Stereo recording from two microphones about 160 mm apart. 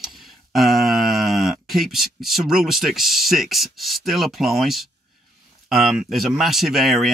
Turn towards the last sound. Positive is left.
turn(degrees=0)  # may be behind; listen again after turning